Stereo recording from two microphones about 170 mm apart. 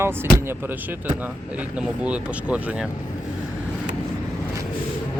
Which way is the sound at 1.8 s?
5° right (ahead or behind).